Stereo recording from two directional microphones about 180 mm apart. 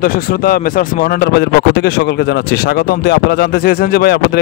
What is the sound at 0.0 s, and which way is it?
Speech, 55° left (ahead or behind).